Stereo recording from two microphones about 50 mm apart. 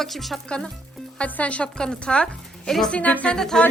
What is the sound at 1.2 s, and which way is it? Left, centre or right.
A woman's voice, left.